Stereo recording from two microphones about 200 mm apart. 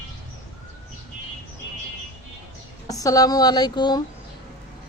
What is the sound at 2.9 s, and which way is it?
A man's voice, 15° left (ahead or behind).